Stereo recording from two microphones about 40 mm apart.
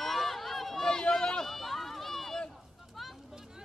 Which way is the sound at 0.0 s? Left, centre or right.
Centre.